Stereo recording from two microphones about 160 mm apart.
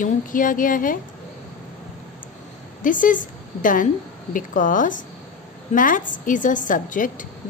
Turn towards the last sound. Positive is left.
turn(degrees=55)  # may be behind; listen again after turning